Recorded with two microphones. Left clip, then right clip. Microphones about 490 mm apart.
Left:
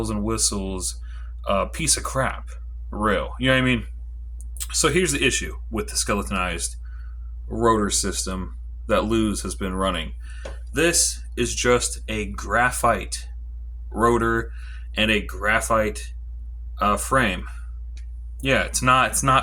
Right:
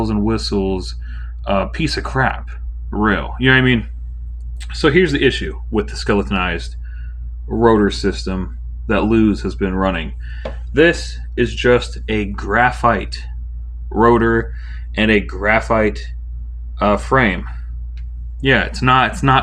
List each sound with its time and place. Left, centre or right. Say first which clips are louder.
0.0 s speech: right 5 dB; left
7.6 s speech: right 7 dB; left
18.3 s speech: right 6 dB; left